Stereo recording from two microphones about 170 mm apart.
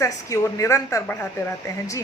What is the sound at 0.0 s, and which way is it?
Speech, 20° left (ahead or behind).